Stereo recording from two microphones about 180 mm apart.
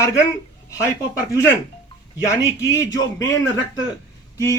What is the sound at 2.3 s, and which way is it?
A man's voice, 15° left (ahead or behind).